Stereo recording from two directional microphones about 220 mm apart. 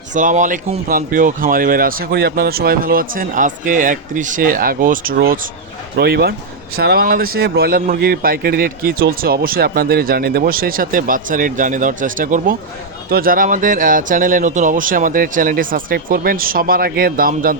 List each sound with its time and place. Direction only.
0.1 s a man's voice: 35° right (ahead or behind)